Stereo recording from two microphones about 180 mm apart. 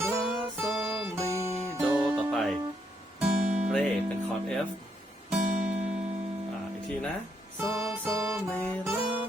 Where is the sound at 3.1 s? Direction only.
40° right (ahead or behind).